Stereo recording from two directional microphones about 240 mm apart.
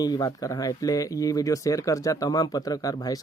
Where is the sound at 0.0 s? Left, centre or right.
Centre.